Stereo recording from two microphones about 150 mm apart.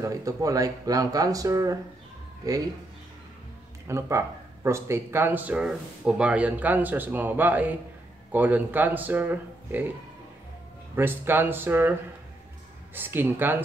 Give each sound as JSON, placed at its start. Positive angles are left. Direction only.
{"t": 0.0, "sound": "speech", "side_deg": -20}
{"t": 3.8, "sound": "speech", "side_deg": -20}
{"t": 11.0, "sound": "speech", "side_deg": -15}
{"t": 12.9, "sound": "speech", "side_deg": -15}